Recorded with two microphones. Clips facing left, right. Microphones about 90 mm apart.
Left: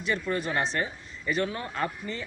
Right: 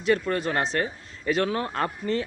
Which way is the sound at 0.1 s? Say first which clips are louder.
Right 5 dB; 50° right (ahead or behind).